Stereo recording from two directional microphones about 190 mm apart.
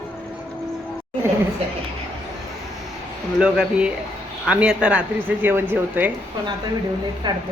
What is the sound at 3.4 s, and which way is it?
Speech, 5° right (ahead or behind).